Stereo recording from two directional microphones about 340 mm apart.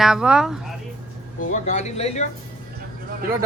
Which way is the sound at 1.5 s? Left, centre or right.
Left.